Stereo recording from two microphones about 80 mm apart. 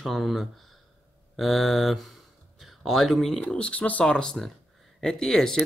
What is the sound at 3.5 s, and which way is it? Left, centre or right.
Speech, centre.